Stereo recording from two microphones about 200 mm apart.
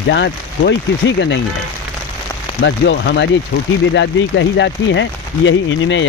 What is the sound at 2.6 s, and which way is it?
Speech, 60° left (ahead or behind).